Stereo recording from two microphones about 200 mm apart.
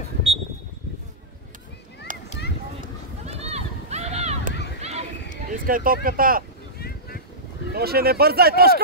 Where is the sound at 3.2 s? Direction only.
30° right (ahead or behind).